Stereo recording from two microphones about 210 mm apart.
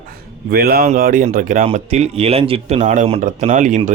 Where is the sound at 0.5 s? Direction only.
45° right (ahead or behind).